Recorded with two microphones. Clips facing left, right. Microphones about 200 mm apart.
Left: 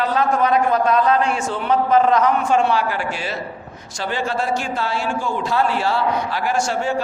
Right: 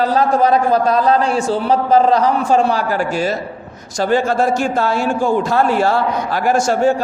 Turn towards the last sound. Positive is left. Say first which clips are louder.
# right 6 dB
turn(degrees=-45)  # may be behind; listen again after turning